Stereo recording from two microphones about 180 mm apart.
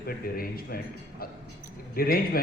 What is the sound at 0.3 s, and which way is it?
Speech, 55° left (ahead or behind).